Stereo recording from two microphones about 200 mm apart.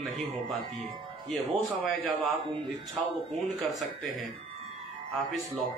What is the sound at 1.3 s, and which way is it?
Speech, centre (ahead or behind).